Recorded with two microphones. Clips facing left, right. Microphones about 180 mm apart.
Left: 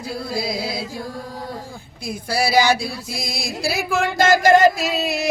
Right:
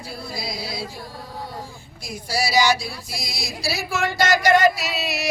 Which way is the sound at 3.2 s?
50° left (ahead or behind).